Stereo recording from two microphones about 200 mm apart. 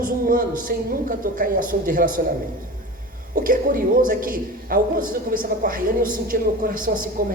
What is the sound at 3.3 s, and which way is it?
A man's voice, 45° right (ahead or behind).